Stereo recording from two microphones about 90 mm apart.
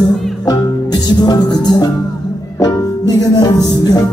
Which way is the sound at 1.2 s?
50° left (ahead or behind).